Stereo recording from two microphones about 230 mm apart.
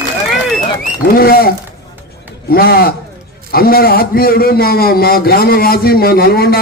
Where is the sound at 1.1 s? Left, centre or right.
Left.